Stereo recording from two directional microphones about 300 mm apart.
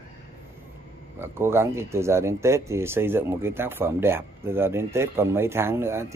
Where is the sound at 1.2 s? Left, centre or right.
Centre.